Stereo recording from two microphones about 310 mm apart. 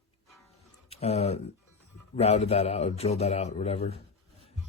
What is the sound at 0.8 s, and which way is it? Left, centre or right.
A man's voice, centre.